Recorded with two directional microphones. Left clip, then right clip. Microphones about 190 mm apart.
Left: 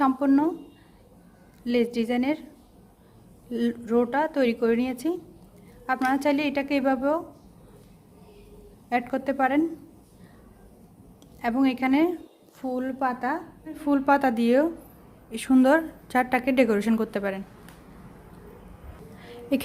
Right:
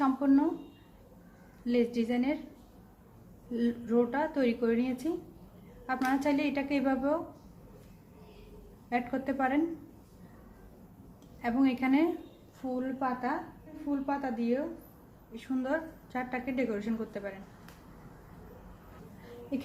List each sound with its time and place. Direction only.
0.0 s a sound: 45° left (ahead or behind)
1.6 s a woman's voice: 45° left (ahead or behind)
3.5 s a woman's voice: 50° left (ahead or behind)
8.9 s a woman's voice: 45° left (ahead or behind)
11.4 s a woman's voice: 45° left (ahead or behind)